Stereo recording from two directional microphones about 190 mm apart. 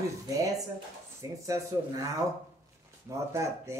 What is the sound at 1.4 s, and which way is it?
Speech, 15° right (ahead or behind).